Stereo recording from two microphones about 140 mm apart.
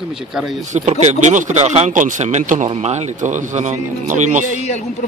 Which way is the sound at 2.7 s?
50° right (ahead or behind).